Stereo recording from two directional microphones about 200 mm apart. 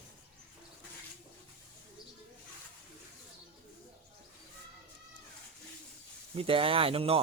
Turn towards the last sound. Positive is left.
turn(degrees=-30)  # may be behind; listen again after turning